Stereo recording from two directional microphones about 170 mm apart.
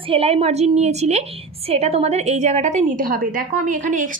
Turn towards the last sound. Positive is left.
turn(degrees=-50)  # may be behind; listen again after turning